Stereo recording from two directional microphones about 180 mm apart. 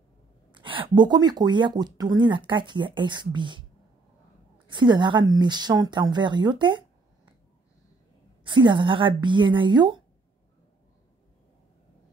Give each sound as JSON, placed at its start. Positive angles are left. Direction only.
{"t": 0.5, "sound": "speech", "side_deg": -30}
{"t": 4.6, "sound": "speech", "side_deg": -25}
{"t": 8.5, "sound": "speech", "side_deg": -25}